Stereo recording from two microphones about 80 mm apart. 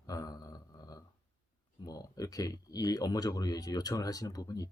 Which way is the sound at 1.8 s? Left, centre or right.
Left.